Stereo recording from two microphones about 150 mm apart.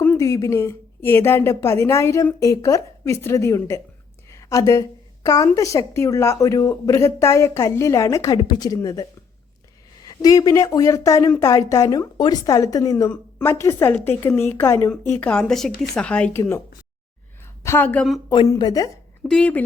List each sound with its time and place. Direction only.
0.2 s speech: 25° left (ahead or behind)
4.3 s a sound: 20° left (ahead or behind)
5.5 s speech: 20° left (ahead or behind); by 18.2 s 5° left (ahead or behind)
18.3 s speech: 25° left (ahead or behind)
19.3 s speech: 10° left (ahead or behind)